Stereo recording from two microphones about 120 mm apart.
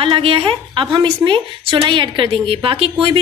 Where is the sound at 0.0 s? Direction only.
50° right (ahead or behind).